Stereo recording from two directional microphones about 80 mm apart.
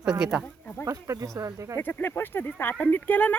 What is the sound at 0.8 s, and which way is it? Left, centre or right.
Speech, right.